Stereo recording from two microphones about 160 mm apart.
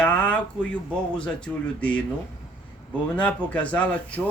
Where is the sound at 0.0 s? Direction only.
10° left (ahead or behind).